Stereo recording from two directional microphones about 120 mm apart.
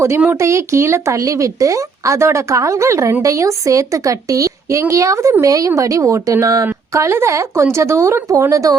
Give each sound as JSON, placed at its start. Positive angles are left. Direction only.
{"t": 0.3, "sound": "a woman's voice", "side_deg": -25}